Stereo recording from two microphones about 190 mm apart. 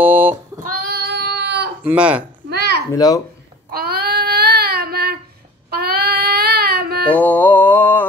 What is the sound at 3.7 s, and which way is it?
Child singing, 55° right (ahead or behind).